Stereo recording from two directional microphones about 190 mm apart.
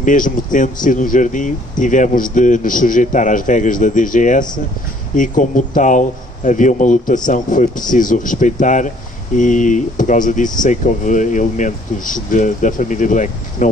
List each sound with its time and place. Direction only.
0.0 s speech: 45° left (ahead or behind)